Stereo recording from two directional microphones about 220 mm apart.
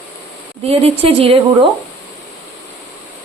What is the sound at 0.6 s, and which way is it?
A woman's voice, 25° right (ahead or behind).